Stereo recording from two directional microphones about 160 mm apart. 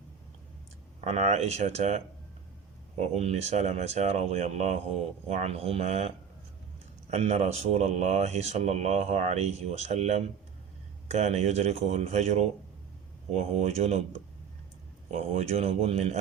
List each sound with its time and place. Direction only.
1.0 s speech: 45° right (ahead or behind)
3.0 s speech: 40° right (ahead or behind)